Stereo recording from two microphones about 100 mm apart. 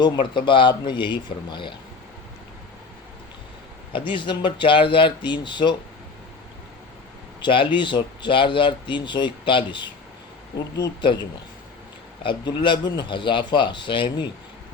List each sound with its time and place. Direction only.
0.0 s speech: 50° left (ahead or behind)
3.9 s speech: 55° left (ahead or behind)
7.4 s speech: 55° left (ahead or behind)